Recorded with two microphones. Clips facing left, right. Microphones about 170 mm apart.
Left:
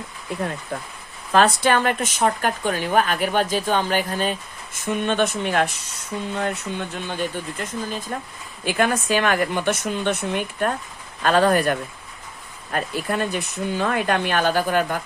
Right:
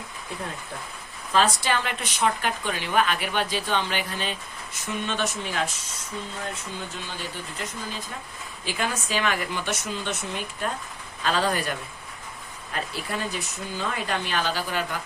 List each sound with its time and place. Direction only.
1.3 s speech: 60° left (ahead or behind)
7.6 s speech: 50° left (ahead or behind)